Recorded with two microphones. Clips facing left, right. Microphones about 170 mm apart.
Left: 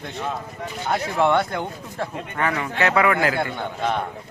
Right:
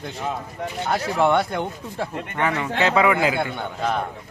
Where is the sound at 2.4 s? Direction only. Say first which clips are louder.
Right 1 dB; 20° right (ahead or behind).